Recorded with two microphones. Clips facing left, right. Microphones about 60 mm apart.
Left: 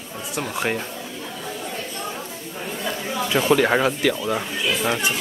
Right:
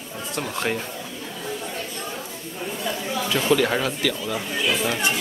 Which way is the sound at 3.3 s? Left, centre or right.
Left.